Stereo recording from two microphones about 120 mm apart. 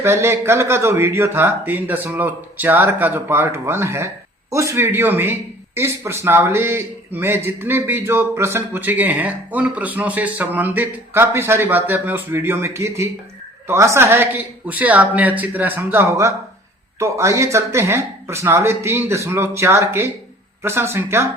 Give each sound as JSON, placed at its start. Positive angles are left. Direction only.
{"t": 0.0, "sound": "a man's voice", "side_deg": -20}